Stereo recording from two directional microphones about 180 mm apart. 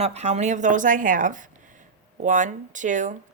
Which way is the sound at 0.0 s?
35° right (ahead or behind).